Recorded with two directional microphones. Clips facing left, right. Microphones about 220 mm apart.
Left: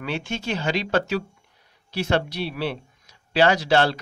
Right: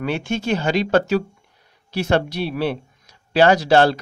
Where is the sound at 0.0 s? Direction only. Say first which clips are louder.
Right 6 dB; 50° right (ahead or behind).